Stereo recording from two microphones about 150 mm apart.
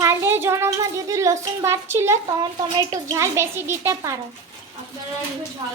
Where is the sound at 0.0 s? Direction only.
15° right (ahead or behind).